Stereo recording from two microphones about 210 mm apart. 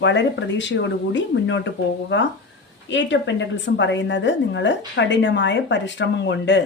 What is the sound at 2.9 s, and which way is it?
Speech, 60° left (ahead or behind).